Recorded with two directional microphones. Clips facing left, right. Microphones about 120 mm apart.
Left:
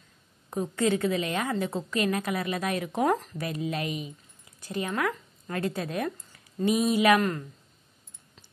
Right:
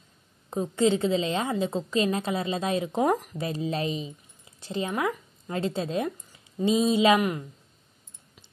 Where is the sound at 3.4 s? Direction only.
30° right (ahead or behind).